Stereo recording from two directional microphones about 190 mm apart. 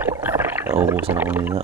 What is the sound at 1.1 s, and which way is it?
Speech, 10° right (ahead or behind).